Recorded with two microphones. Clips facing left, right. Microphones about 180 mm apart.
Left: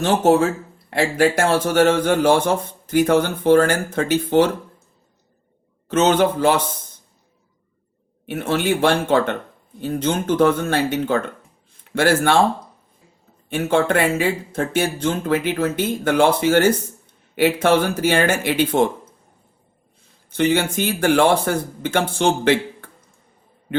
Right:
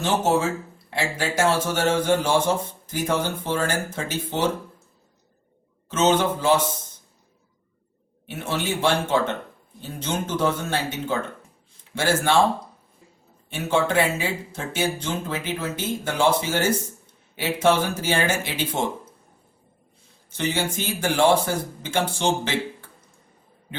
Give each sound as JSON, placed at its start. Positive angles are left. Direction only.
{"t": 0.0, "sound": "speech", "side_deg": 55}
{"t": 5.9, "sound": "speech", "side_deg": 60}
{"t": 8.3, "sound": "speech", "side_deg": 60}
{"t": 13.5, "sound": "speech", "side_deg": 55}
{"t": 20.3, "sound": "speech", "side_deg": 60}